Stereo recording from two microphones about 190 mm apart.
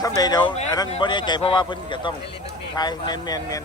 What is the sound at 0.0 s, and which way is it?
A man's voice, 20° left (ahead or behind).